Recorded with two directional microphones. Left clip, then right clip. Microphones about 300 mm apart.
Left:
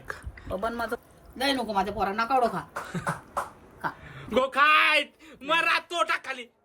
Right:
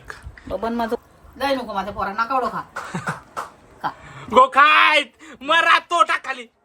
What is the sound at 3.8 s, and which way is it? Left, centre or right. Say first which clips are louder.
Speech: right 6 dB; centre.